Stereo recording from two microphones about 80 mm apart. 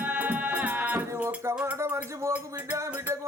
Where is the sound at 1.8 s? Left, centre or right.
Right.